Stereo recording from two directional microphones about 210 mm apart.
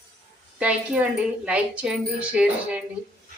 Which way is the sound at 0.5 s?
5° right (ahead or behind).